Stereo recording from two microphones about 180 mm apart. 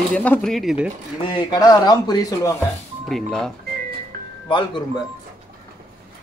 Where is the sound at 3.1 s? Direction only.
Centre (ahead or behind).